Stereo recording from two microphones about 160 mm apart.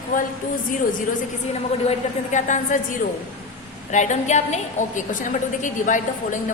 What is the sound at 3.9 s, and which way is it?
A woman's voice, 50° left (ahead or behind).